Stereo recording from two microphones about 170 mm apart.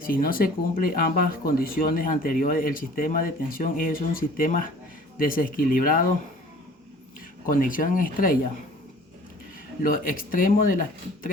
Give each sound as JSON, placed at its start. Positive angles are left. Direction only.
{"t": 0.0, "sound": "speech", "side_deg": 55}
{"t": 7.4, "sound": "speech", "side_deg": 55}
{"t": 9.8, "sound": "speech", "side_deg": 55}